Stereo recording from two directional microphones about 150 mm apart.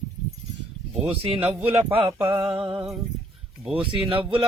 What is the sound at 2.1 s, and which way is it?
Mantra, 20° right (ahead or behind).